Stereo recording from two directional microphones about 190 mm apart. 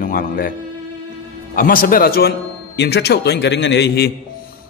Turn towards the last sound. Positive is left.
turn(degrees=60)  # may be behind; listen again after turning